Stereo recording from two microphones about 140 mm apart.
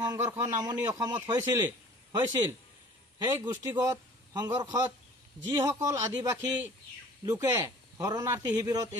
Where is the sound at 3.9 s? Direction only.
30° right (ahead or behind).